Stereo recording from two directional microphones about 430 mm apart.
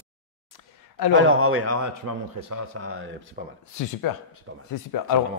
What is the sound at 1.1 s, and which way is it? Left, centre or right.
A man's voice, right.